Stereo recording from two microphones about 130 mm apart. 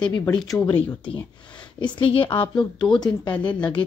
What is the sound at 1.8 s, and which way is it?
A woman's voice, 45° left (ahead or behind).